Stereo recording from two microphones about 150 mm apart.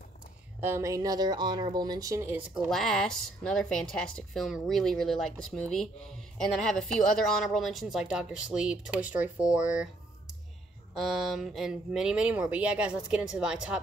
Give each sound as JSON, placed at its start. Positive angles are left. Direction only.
{"t": 0.6, "sound": "speech", "side_deg": -15}
{"t": 2.7, "sound": "a woman's voice", "side_deg": 5}
{"t": 11.0, "sound": "a woman's voice", "side_deg": 0}